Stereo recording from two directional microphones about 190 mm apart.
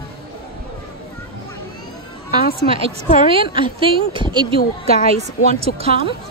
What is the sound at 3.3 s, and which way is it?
A woman's voice, 25° right (ahead or behind).